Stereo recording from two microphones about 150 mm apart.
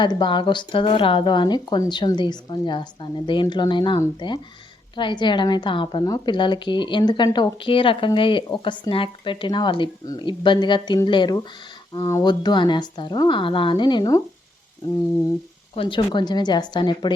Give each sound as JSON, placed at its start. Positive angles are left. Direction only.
{"t": 0.0, "sound": "a woman's voice", "side_deg": 30}
{"t": 15.7, "sound": "a woman's voice", "side_deg": 35}